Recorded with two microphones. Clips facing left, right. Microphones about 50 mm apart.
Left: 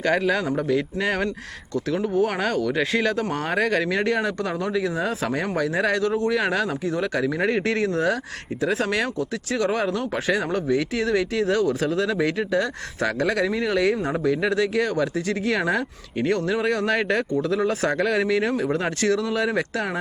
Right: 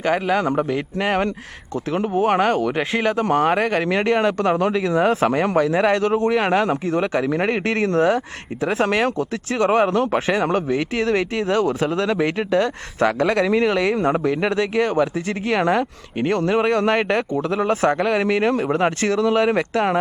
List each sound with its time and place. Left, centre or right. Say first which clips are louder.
0.0 s a man's voice: right 2 dB; right
0.4 s speech: right 2 dB; right
4.2 s speech: right 7 dB; right
13.9 s speech: right 4 dB; right
14.4 s speech: right 2 dB; right
16.4 s speech: right 5 dB; right